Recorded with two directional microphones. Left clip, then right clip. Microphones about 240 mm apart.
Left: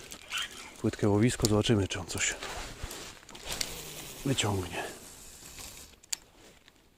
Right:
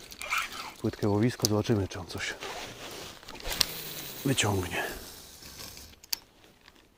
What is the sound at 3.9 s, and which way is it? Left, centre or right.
Cricket, centre.